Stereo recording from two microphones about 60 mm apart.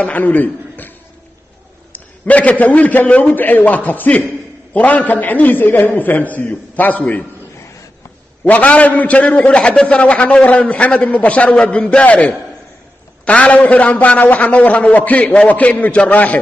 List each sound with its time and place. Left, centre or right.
0.0 s a man's voice: left
8.5 s a man's voice: left